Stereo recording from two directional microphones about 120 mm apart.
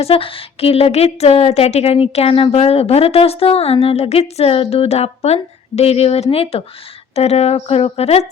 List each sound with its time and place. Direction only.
0.0 s speech: 50° left (ahead or behind)